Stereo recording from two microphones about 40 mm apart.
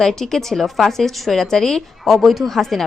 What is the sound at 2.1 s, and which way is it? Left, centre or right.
Speech, centre.